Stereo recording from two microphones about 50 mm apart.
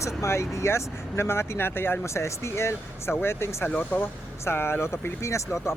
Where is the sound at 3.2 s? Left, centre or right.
Left.